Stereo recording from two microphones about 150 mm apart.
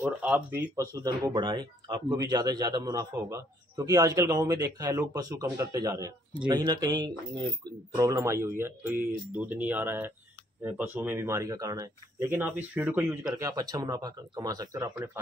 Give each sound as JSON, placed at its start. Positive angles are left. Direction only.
{"t": 0.0, "sound": "speech", "side_deg": -15}
{"t": 7.9, "sound": "speech", "side_deg": -20}